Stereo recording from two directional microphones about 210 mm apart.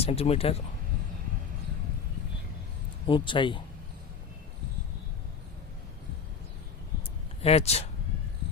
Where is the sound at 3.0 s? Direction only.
25° left (ahead or behind).